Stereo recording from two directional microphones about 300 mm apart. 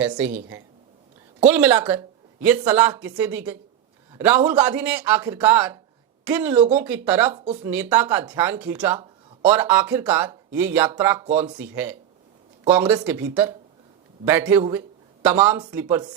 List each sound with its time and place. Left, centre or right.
0.3 s speech: centre
6.5 s speech: right
6.7 s speech: centre
11.3 s speech: right
11.5 s speech: centre